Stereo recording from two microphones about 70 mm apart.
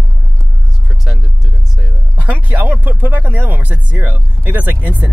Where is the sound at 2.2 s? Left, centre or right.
Right.